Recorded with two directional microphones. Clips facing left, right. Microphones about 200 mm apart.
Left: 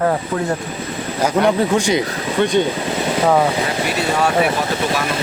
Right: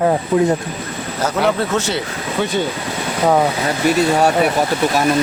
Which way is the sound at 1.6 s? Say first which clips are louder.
Left 3 dB; 15° left (ahead or behind).